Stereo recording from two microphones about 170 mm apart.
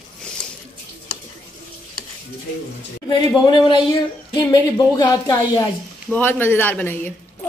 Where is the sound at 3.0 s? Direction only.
25° left (ahead or behind).